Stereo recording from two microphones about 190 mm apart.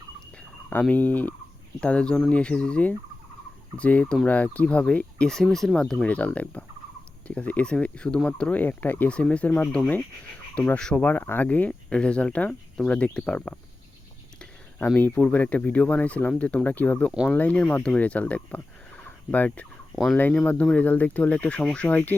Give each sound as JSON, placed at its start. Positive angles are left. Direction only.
{"t": 0.7, "sound": "speech", "side_deg": 10}
{"t": 1.8, "sound": "fowl", "side_deg": 5}
{"t": 3.8, "sound": "speech", "side_deg": 5}
{"t": 14.8, "sound": "speech", "side_deg": 10}
{"t": 17.1, "sound": "fowl", "side_deg": -5}
{"t": 17.3, "sound": "speech", "side_deg": 5}